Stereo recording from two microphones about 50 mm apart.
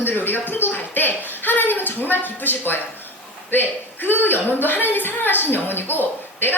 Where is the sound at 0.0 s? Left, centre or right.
Left.